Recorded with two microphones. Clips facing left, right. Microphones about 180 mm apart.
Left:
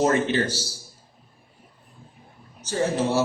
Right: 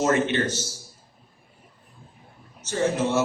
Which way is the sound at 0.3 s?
35° left (ahead or behind).